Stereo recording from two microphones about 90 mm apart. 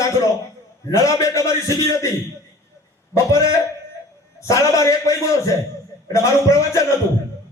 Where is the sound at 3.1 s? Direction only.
35° left (ahead or behind).